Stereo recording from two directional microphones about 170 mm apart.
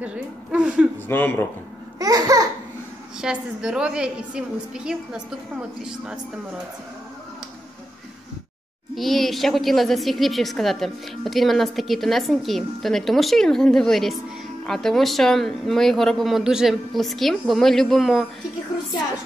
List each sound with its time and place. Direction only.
0.0 s a woman's voice: 5° right (ahead or behind)
1.0 s speech: 10° left (ahead or behind)
2.0 s babbling: 20° right (ahead or behind)
3.2 s a woman's voice: 5° right (ahead or behind)
8.9 s a woman's voice: centre (ahead or behind)